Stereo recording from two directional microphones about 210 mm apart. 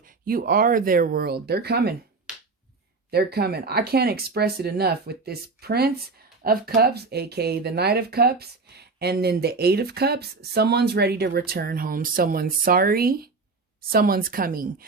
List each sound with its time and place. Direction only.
0.0 s speech: 40° right (ahead or behind)
2.3 s finger snapping: 5° right (ahead or behind)
3.1 s speech: 50° right (ahead or behind)